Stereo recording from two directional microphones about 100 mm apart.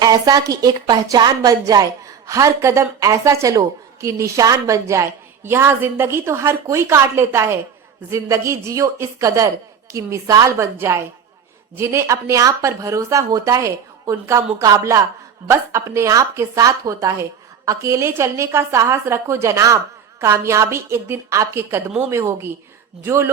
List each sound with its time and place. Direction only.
0.0 s a woman's voice: 40° right (ahead or behind)